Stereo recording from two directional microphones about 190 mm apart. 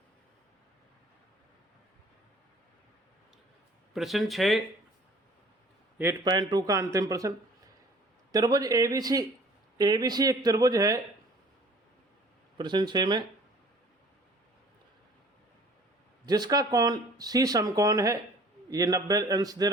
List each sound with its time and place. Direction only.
3.9 s speech: centre (ahead or behind)
6.0 s speech: 20° right (ahead or behind)
12.5 s speech: 25° right (ahead or behind)
16.2 s speech: 20° right (ahead or behind)